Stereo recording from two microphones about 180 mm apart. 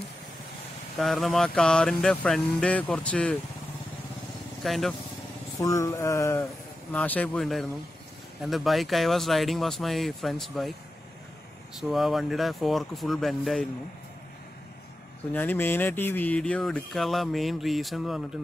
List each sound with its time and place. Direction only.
0.9 s speech: centre (ahead or behind)
4.6 s speech: centre (ahead or behind)
5.6 s speech: 15° left (ahead or behind); by 10.8 s centre (ahead or behind)
11.8 s speech: centre (ahead or behind)
15.3 s speech: 10° left (ahead or behind)